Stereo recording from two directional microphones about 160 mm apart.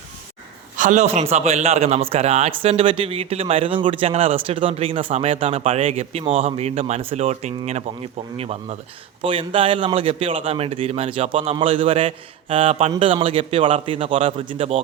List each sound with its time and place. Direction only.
0.8 s a man's voice: 50° right (ahead or behind); by 14.8 s 35° right (ahead or behind)